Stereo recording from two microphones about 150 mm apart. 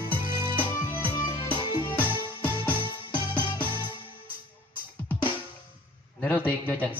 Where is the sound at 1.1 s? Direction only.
35° left (ahead or behind).